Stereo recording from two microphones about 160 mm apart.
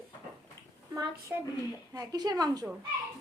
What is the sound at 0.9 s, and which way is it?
A woman's voice, 20° right (ahead or behind).